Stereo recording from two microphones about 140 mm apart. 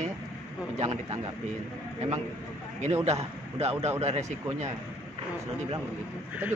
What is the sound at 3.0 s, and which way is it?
A man's voice, 50° right (ahead or behind).